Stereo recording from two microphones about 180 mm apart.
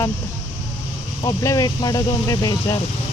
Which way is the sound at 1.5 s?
20° left (ahead or behind).